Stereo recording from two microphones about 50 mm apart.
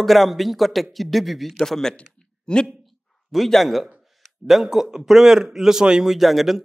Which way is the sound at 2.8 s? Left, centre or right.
Centre.